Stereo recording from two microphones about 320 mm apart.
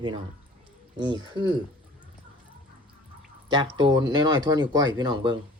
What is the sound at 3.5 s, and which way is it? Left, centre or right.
Speech, centre.